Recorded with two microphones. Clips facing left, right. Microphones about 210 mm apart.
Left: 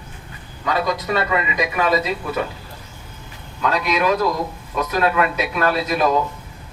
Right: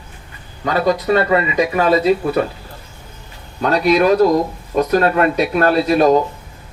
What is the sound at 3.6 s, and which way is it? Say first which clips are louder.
Speech: right 6 dB; 35° right (ahead or behind).